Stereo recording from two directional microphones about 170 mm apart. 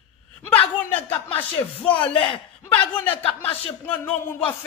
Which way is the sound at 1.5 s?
30° left (ahead or behind).